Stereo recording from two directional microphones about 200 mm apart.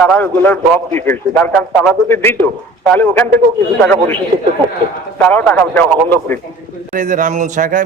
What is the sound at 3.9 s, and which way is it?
Speech, 10° left (ahead or behind).